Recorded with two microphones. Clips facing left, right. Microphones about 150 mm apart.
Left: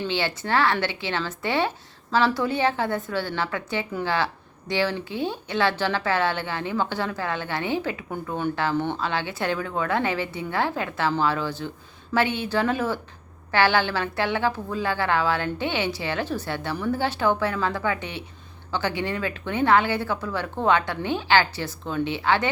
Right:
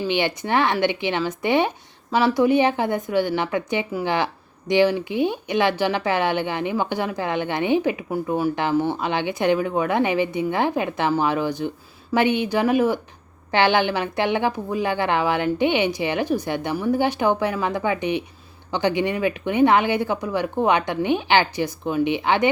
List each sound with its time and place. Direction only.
0.1 s speech: 15° right (ahead or behind)